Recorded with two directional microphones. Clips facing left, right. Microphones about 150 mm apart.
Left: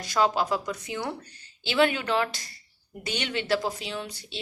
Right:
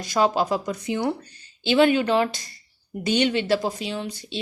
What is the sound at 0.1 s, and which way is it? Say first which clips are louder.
Speech: right 3 dB; 25° right (ahead or behind).